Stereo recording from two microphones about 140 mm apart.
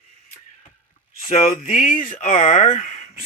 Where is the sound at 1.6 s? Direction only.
70° left (ahead or behind).